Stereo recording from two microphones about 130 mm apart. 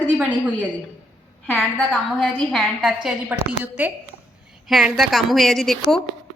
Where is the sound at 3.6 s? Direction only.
15° right (ahead or behind).